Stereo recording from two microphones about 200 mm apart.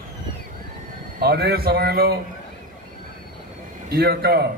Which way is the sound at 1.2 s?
50° right (ahead or behind).